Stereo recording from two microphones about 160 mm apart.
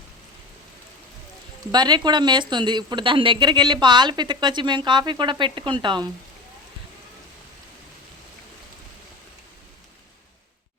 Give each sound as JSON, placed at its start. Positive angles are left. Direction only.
{"t": 1.7, "sound": "a woman's voice", "side_deg": -25}